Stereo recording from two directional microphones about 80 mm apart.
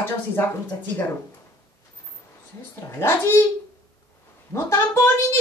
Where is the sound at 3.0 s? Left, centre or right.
Left.